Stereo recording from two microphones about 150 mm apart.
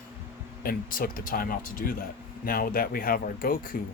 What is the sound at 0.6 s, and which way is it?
Speech, 75° left (ahead or behind).